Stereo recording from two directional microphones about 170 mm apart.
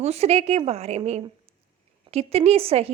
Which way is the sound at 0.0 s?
40° right (ahead or behind).